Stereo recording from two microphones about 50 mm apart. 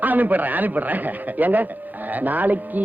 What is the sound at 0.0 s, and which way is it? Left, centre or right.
Speech, right.